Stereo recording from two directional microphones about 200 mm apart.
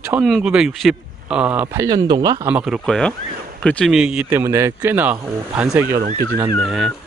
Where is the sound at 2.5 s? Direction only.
5° right (ahead or behind).